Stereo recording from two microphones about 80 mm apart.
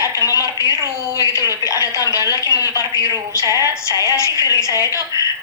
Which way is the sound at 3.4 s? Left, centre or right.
Right.